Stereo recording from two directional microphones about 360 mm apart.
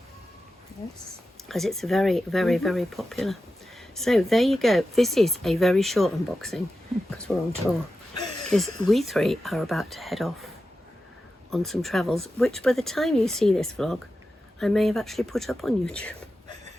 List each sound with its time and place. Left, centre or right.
1.5 s speech: centre
11.5 s speech: centre